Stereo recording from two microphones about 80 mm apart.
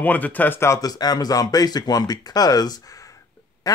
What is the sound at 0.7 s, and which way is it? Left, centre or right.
Speech, left.